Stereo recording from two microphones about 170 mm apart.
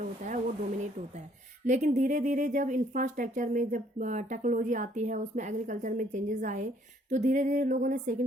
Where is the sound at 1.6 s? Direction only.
45° right (ahead or behind).